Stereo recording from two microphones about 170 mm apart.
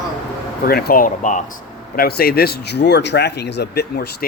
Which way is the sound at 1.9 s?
65° left (ahead or behind).